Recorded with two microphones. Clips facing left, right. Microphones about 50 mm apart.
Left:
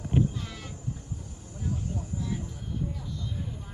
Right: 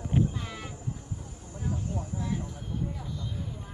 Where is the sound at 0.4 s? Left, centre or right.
Centre.